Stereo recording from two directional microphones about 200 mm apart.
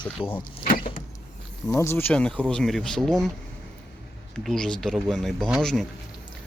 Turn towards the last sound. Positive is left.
turn(degrees=0)  # may be behind; listen again after turning